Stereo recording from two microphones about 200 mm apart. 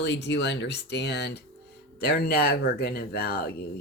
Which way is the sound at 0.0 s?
60° left (ahead or behind).